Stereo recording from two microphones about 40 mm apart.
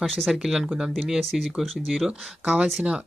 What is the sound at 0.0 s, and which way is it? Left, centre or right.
Speech, centre.